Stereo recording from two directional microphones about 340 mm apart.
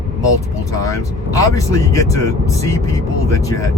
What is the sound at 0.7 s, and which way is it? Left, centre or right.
Speech, centre.